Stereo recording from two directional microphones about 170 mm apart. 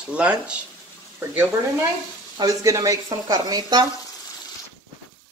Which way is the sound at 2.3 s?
20° right (ahead or behind).